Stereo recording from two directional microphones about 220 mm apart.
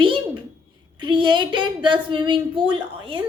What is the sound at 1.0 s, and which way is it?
A woman's voice, 20° right (ahead or behind).